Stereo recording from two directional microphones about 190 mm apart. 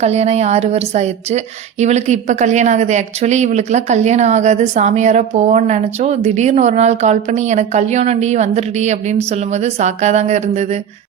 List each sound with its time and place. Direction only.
0.0 s speech: 35° right (ahead or behind)